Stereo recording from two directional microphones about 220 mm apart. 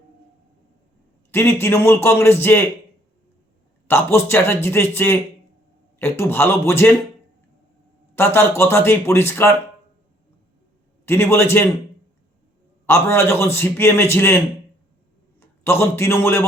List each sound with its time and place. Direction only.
1.3 s a man's voice: 10° left (ahead or behind)
3.8 s a man's voice: 10° left (ahead or behind)
8.1 s a man's voice: 10° left (ahead or behind)
11.0 s a man's voice: 10° left (ahead or behind)
12.8 s a man's voice: 10° left (ahead or behind)
15.4 s a man's voice: 10° left (ahead or behind)